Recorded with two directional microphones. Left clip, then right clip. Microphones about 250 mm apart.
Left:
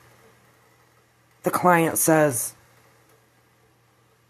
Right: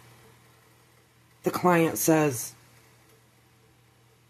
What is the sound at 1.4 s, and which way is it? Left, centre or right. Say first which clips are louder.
A woman's voice: left 4 dB; centre.